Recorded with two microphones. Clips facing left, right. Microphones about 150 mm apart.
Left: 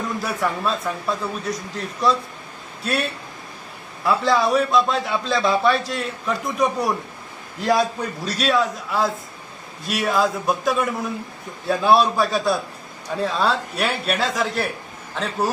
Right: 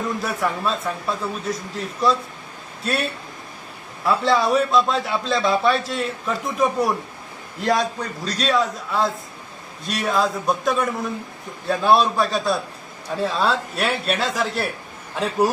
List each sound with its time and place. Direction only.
0.2 s a man's voice: centre (ahead or behind)